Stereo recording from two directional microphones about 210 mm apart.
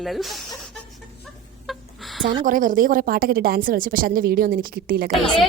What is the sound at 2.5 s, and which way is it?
A woman's voice, 40° right (ahead or behind).